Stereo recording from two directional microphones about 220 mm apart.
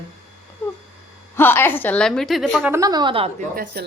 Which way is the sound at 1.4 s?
10° left (ahead or behind).